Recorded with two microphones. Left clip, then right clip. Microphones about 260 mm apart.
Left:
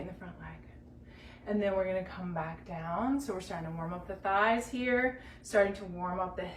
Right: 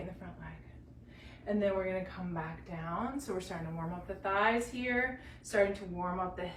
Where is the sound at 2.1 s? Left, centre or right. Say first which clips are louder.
Left 3 dB; centre.